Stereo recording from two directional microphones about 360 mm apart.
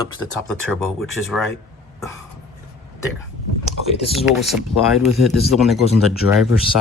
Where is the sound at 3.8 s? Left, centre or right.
Centre.